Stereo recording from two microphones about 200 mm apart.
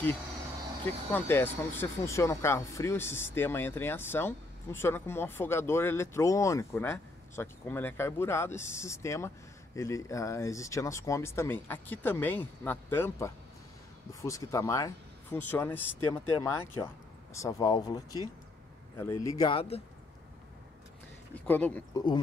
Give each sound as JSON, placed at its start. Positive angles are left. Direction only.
{"t": 1.1, "sound": "speech", "side_deg": 10}
{"t": 21.5, "sound": "speech", "side_deg": 10}